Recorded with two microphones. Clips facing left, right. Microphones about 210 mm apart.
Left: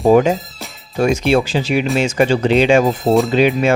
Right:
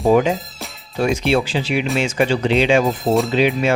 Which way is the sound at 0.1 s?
45° left (ahead or behind).